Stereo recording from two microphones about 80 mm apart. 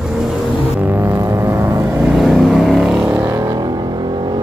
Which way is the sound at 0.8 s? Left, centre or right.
Right.